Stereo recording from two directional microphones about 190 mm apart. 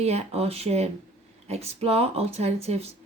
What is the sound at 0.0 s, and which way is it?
Speech, 35° right (ahead or behind).